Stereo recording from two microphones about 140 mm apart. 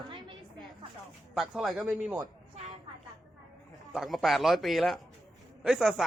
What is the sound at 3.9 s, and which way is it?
A man's voice, centre (ahead or behind).